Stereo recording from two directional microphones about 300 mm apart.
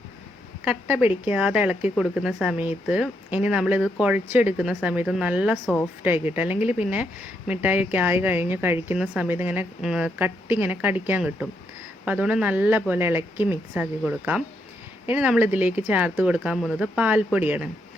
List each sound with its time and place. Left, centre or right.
0.6 s speech: centre